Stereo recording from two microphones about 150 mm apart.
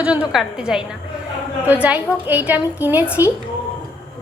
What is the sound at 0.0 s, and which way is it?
A woman's voice, 10° right (ahead or behind).